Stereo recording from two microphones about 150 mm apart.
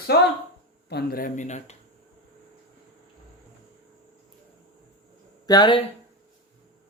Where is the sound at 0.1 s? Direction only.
90° left.